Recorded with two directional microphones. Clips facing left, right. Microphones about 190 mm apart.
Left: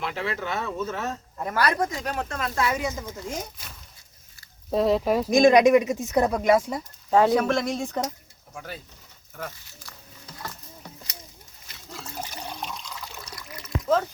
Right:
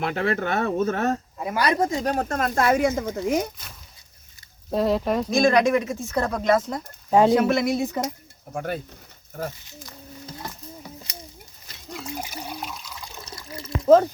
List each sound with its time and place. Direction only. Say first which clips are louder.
0.0 s speech: right 6 dB; 50° right (ahead or behind)
1.4 s speech: right 1 dB; 10° right (ahead or behind)
1.6 s speech: right 5 dB; 25° right (ahead or behind); by 3.5 s 65° right (ahead or behind)
4.7 s speech: left 1 dB; centre (ahead or behind)
5.3 s speech: left 3 dB; 15° left (ahead or behind)
7.1 s speech: right 2 dB; 20° right (ahead or behind)
7.3 s speech: right 3 dB; 10° right (ahead or behind)
8.5 s speech: right 10 dB; 55° right (ahead or behind)
10.2 s a sound: right 2 dB; 25° right (ahead or behind)
10.8 s a sound: right 1 dB; 10° right (ahead or behind)
11.9 s water: right 4 dB; 15° right (ahead or behind); by 13.7 s 30° right (ahead or behind)